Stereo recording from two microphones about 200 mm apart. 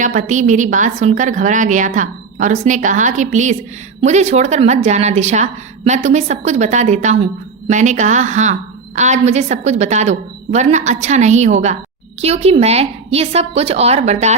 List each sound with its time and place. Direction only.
0.0 s a woman's voice: 40° right (ahead or behind)